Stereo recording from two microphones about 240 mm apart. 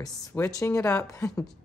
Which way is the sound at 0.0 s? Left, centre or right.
Centre.